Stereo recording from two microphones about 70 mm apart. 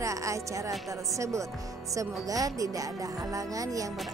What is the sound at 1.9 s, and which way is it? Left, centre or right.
Speech, right.